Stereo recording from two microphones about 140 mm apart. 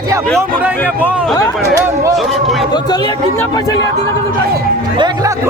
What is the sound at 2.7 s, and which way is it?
Speech, 30° left (ahead or behind).